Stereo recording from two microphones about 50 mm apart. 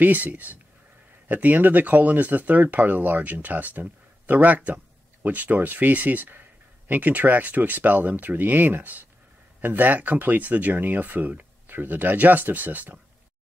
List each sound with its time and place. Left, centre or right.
0.0 s speech: right